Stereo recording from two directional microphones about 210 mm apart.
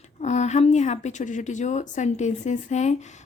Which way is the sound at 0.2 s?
35° left (ahead or behind).